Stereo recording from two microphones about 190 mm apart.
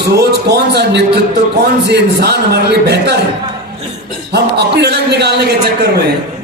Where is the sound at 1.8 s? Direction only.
60° right (ahead or behind).